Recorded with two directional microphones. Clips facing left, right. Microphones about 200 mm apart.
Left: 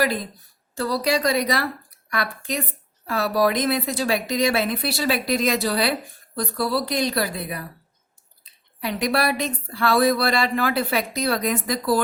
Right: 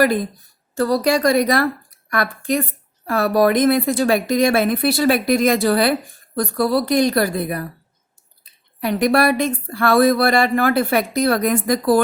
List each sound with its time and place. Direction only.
0.8 s speech: 50° right (ahead or behind)
8.8 s speech: 50° right (ahead or behind)